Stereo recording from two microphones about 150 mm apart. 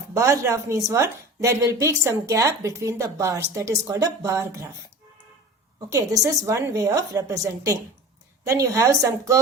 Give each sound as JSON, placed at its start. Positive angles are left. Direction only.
{"t": 0.1, "sound": "a woman's voice", "side_deg": -20}
{"t": 5.9, "sound": "a woman's voice", "side_deg": -20}